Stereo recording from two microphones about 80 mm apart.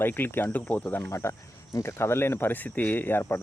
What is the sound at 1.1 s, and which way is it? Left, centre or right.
Speech, left.